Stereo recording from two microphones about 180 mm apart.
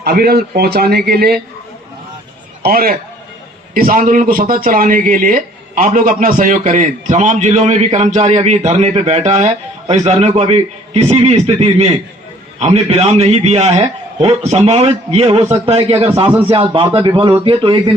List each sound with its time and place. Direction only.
0.0 s a man's voice: 60° right (ahead or behind)
2.6 s a man's voice: 55° right (ahead or behind); by 17.7 s 30° right (ahead or behind)